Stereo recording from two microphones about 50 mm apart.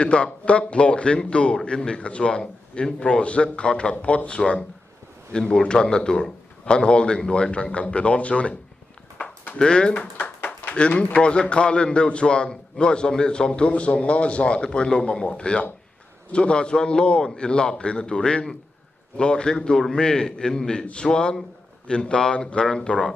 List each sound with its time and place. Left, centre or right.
0.0 s a man's voice: left
9.6 s a man's voice: centre
10.1 s a sound: left
10.7 s a man's voice: left